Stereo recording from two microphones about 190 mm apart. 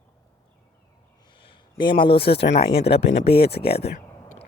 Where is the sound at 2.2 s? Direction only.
60° left (ahead or behind).